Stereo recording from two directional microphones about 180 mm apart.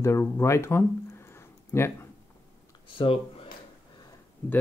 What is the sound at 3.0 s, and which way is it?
Speech, 30° left (ahead or behind).